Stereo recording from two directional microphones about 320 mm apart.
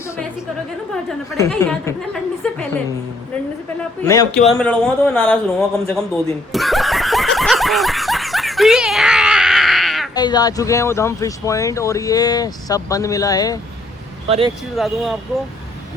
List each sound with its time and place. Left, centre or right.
1.4 s speech: centre
2.4 s a sound: centre
4.0 s speech: centre
6.5 s snicker: centre
10.2 s speech: centre
14.3 s speech: centre
14.8 s speech: centre